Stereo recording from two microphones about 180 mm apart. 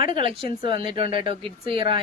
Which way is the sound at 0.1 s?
30° right (ahead or behind).